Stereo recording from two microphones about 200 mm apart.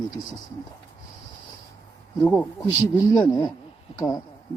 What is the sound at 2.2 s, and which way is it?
Speech, 10° left (ahead or behind).